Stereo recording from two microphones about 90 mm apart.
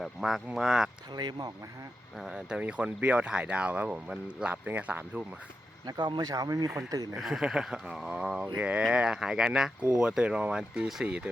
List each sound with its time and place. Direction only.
0.0 s speech: centre (ahead or behind)
1.1 s speech: 55° right (ahead or behind)
2.1 s speech: 5° right (ahead or behind)
5.8 s speech: 55° right (ahead or behind)
7.2 s speech: 5° right (ahead or behind)